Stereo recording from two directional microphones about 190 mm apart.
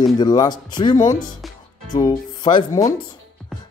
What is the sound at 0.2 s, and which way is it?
Speech, 20° left (ahead or behind).